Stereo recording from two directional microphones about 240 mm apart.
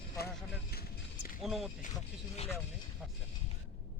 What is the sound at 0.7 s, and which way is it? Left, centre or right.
Vehicle, left.